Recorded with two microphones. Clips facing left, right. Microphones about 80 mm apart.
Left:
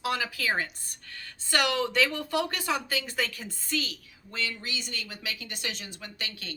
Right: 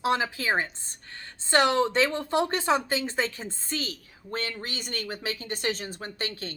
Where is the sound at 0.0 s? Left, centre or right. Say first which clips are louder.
Right 4 dB; right.